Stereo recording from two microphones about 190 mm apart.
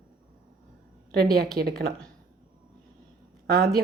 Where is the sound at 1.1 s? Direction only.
55° right (ahead or behind).